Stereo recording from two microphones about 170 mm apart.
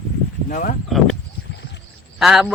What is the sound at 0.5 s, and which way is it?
Speech, 50° left (ahead or behind).